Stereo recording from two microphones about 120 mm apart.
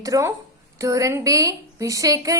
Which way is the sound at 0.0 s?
25° right (ahead or behind).